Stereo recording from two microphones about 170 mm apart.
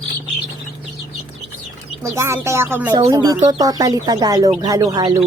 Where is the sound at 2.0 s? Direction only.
15° right (ahead or behind).